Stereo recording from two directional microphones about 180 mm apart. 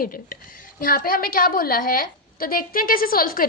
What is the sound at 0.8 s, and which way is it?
A woman's voice, 55° left (ahead or behind).